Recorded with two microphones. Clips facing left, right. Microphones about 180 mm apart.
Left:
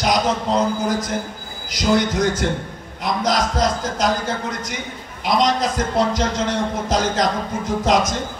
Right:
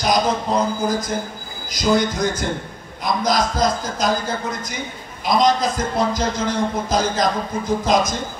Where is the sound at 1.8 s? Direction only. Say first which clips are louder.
Even; 75° left (ahead or behind).